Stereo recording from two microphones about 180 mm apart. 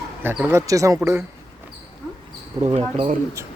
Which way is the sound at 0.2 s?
10° right (ahead or behind).